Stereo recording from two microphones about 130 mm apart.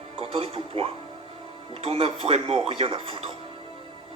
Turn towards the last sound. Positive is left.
turn(degrees=-45)  # may be behind; listen again after turning